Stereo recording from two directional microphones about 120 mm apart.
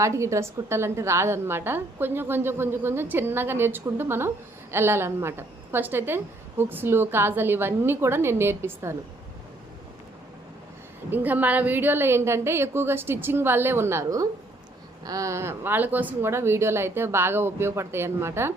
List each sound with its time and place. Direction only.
0.0 s a woman's voice: 25° right (ahead or behind)
11.1 s a woman's voice: 15° right (ahead or behind)